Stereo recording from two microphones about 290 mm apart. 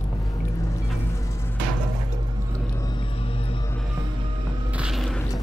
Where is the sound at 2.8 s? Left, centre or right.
Centre.